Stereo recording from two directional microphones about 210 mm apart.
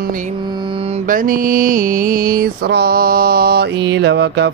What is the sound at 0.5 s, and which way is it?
Mantra, 25° right (ahead or behind).